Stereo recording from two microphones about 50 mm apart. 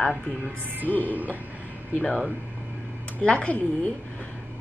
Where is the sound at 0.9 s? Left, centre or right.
Right.